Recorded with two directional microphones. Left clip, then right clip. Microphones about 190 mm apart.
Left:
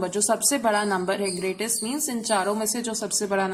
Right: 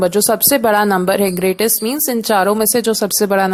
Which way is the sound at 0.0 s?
45° right (ahead or behind).